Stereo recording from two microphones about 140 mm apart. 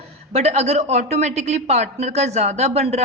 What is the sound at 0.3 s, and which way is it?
A woman's voice, 50° right (ahead or behind).